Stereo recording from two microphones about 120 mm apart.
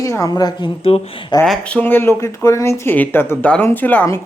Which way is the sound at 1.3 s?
35° left (ahead or behind).